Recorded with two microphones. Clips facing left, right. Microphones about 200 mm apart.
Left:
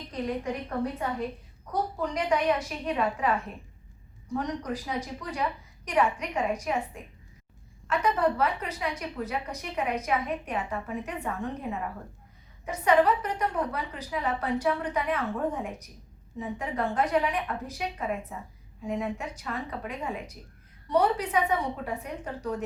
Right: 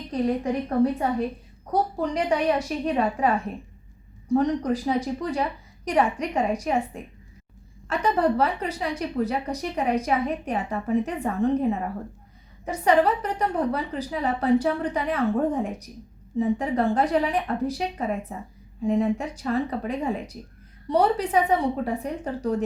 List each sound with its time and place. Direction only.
0.1 s a woman's voice: 35° right (ahead or behind)
7.9 s a woman's voice: 30° right (ahead or behind)